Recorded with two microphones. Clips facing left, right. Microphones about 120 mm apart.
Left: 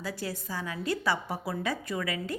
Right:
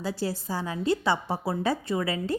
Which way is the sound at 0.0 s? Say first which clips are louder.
Right 5 dB; 30° right (ahead or behind).